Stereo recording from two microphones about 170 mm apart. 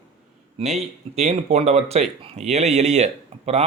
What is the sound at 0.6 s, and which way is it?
A man's voice, 40° right (ahead or behind).